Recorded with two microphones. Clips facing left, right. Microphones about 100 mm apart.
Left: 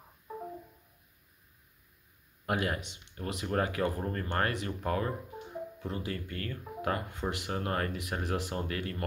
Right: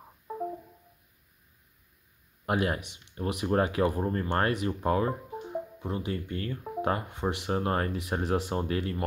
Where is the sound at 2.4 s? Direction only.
25° right (ahead or behind).